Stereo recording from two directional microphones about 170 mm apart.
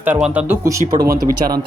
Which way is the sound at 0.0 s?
10° right (ahead or behind).